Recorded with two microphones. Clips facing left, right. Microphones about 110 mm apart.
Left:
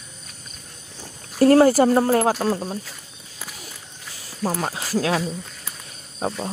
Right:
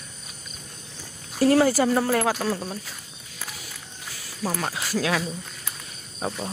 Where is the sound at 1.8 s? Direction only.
35° left (ahead or behind).